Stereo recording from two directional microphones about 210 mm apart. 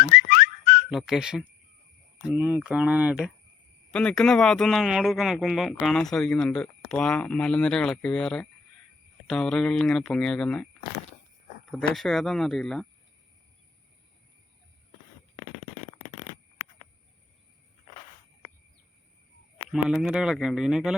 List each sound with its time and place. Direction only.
0.1 s whistle: 45° left (ahead or behind)
0.9 s speech: centre (ahead or behind)
11.7 s speech: 5° left (ahead or behind)
19.7 s speech: 5° right (ahead or behind)